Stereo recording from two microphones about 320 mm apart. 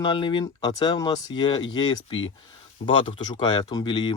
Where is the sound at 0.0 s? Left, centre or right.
Centre.